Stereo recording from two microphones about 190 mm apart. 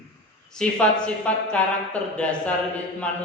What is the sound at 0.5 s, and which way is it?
Speech, 5° left (ahead or behind).